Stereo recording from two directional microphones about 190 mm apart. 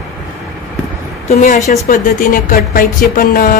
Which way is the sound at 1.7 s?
45° left (ahead or behind).